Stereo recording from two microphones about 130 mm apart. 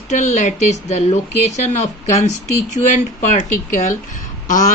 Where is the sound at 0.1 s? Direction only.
65° left (ahead or behind).